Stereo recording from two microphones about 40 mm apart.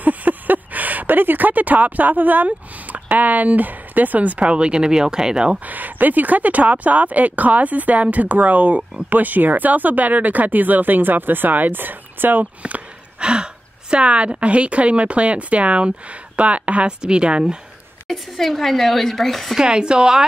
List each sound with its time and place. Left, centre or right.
0.0 s speech: right; by 5.6 s centre
5.7 s a woman's voice: right
13.2 s a woman's voice: right
18.1 s speech: centre
19.5 s speech: centre